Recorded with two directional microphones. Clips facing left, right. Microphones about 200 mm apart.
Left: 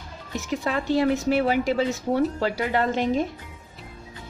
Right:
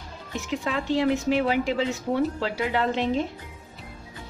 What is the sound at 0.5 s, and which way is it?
A woman's voice, 40° left (ahead or behind).